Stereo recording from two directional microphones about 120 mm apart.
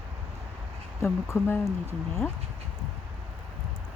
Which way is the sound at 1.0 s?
20° left (ahead or behind).